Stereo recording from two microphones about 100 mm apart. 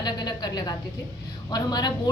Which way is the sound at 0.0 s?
45° left (ahead or behind).